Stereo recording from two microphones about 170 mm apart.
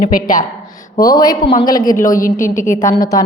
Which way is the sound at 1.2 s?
20° left (ahead or behind).